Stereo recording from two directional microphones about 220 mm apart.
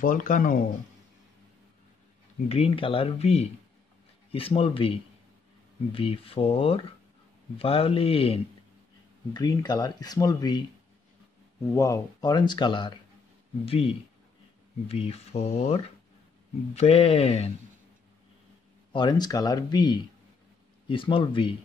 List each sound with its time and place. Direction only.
0.0 s speech: 40° left (ahead or behind)
2.4 s speech: 25° left (ahead or behind)
11.6 s speech: 15° left (ahead or behind)
18.9 s speech: 20° left (ahead or behind)